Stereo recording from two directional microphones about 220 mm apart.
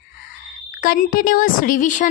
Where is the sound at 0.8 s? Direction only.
40° left (ahead or behind).